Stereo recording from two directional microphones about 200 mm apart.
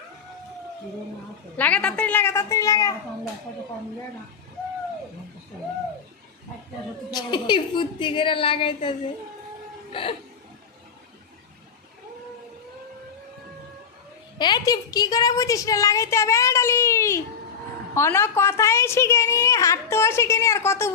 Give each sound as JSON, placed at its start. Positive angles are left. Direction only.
{"t": 1.5, "sound": "a woman's voice", "side_deg": 5}
{"t": 7.1, "sound": "a woman's voice", "side_deg": 20}
{"t": 14.3, "sound": "a woman's voice", "side_deg": 20}